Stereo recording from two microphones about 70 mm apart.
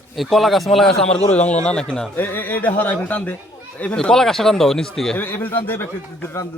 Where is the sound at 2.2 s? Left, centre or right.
Left; by 5.2 s centre.